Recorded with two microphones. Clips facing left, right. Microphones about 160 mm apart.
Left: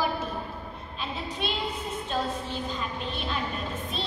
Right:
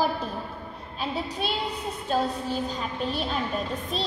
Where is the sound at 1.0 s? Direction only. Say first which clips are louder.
Right 4 dB; 40° right (ahead or behind).